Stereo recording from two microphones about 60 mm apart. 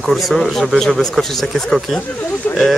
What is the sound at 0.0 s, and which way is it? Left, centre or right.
A man's voice, centre.